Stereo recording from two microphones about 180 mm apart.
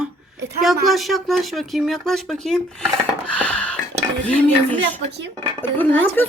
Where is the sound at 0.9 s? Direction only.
Centre (ahead or behind).